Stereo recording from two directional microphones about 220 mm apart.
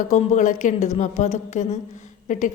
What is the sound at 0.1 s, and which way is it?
A woman's voice, 35° left (ahead or behind).